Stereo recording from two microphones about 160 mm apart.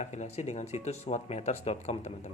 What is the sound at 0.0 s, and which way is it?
Speech, 45° left (ahead or behind).